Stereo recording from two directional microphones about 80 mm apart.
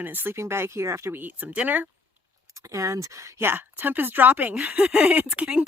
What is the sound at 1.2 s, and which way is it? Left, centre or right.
Speech, right.